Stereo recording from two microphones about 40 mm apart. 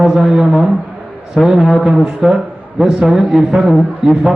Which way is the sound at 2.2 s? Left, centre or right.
Centre.